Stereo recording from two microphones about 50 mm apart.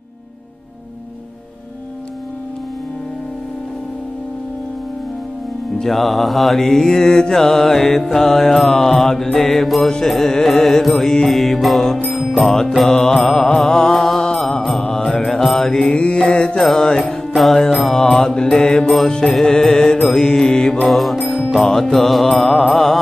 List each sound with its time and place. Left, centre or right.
5.8 s mantra: centre
9.9 s music: centre
12.4 s mantra: centre
13.3 s music: centre
14.6 s mantra: centre
15.9 s mantra: left
17.4 s music: centre
17.9 s mantra: centre
20.9 s music: centre
21.5 s mantra: centre